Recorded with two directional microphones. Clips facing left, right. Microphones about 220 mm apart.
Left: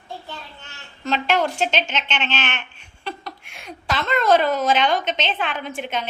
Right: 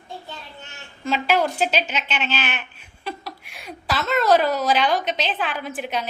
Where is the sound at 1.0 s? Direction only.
5° right (ahead or behind).